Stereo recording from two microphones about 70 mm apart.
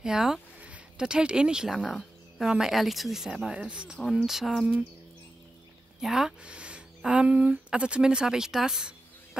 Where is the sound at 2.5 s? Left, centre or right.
Centre.